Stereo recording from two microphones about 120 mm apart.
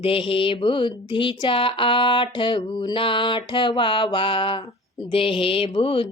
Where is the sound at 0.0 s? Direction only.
50° left (ahead or behind).